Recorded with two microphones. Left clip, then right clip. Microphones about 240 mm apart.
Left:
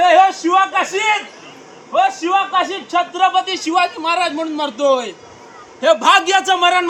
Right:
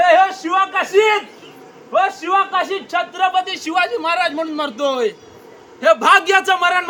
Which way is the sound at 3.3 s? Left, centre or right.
Centre.